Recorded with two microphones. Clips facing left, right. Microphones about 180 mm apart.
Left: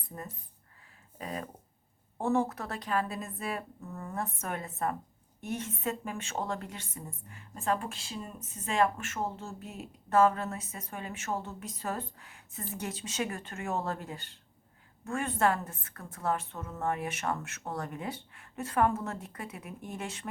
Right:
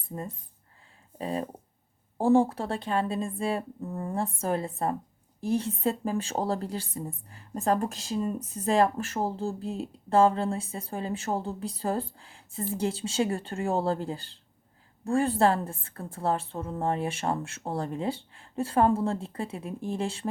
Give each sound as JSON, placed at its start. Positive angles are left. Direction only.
{"t": 0.1, "sound": "a woman's voice", "side_deg": -25}